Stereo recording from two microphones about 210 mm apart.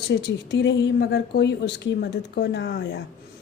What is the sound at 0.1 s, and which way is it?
A woman's voice, 55° left (ahead or behind).